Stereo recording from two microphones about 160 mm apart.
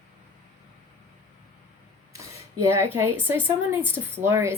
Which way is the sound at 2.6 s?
15° right (ahead or behind).